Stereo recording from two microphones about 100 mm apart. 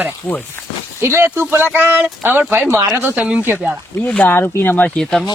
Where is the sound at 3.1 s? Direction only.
10° right (ahead or behind).